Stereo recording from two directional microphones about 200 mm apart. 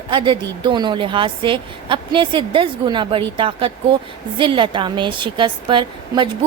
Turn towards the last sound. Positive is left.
turn(degrees=-25)  # may be behind; listen again after turning